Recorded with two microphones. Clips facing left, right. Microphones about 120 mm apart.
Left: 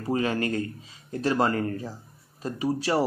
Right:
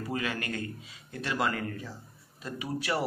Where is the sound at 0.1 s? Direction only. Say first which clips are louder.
Left 9 dB; 35° left (ahead or behind).